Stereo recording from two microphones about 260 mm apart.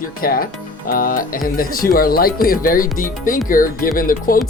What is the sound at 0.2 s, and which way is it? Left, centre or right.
Speech, left.